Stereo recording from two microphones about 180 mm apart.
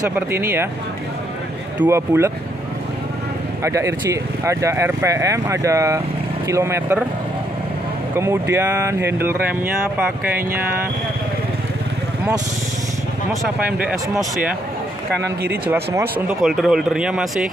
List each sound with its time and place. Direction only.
0.1 s speech: 15° right (ahead or behind)
1.8 s speech: 15° right (ahead or behind)
3.6 s speech: 15° right (ahead or behind)
8.2 s speech: 15° right (ahead or behind)
15.7 s speech: 10° right (ahead or behind)
16.4 s speech: centre (ahead or behind)